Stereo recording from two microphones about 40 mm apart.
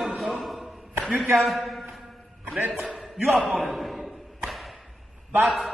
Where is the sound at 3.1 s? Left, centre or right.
Centre.